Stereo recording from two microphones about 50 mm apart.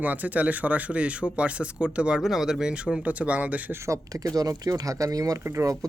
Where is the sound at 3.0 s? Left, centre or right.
Right.